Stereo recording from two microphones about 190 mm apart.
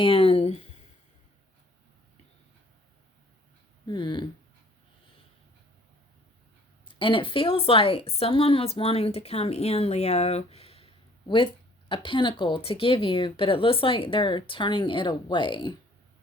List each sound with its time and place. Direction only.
0.0 s speech: 30° left (ahead or behind)
3.8 s speech: 25° left (ahead or behind)
6.8 s a woman's voice: 25° left (ahead or behind)